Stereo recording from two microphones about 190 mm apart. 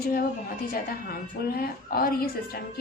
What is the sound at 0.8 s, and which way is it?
A woman's voice, 50° left (ahead or behind).